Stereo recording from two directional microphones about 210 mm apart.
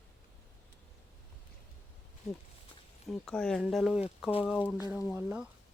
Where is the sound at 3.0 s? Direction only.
5° left (ahead or behind).